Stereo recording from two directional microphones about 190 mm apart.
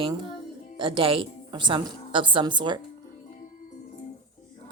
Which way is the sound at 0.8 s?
25° right (ahead or behind).